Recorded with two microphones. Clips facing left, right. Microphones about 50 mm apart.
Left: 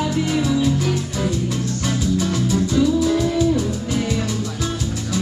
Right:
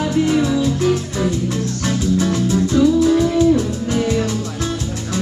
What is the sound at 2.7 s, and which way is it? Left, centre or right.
Music, centre.